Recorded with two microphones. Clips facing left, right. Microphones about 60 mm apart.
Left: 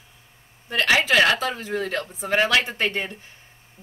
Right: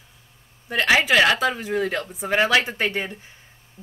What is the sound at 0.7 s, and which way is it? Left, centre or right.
Speech, centre.